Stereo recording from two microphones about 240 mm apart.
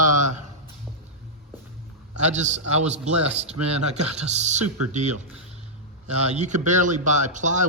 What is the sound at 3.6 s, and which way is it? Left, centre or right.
Speech, right.